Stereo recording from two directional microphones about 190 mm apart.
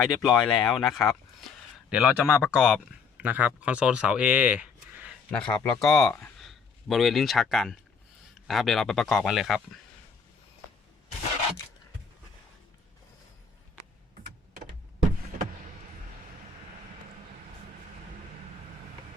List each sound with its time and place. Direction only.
0.0 s a man's voice: centre (ahead or behind)
5.3 s speech: 5° left (ahead or behind)